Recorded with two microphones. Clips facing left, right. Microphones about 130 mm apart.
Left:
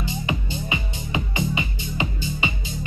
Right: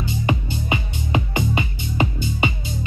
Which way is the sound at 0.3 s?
50° right (ahead or behind).